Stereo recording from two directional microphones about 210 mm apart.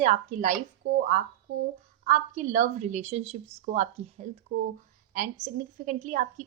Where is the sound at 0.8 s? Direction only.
90° right.